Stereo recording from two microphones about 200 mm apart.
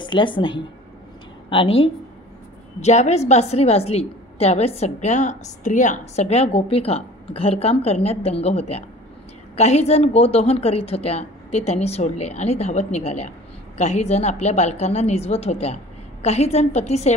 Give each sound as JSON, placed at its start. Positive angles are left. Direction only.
{"t": 0.0, "sound": "a woman's voice", "side_deg": 25}